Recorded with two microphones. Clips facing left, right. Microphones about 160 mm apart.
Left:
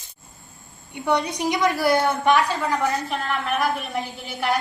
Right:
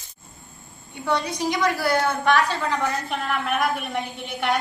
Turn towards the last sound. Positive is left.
turn(degrees=0)  # may be behind; listen again after turning